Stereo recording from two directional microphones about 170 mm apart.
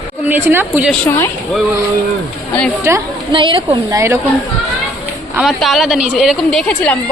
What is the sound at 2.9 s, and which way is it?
Speech, 15° right (ahead or behind).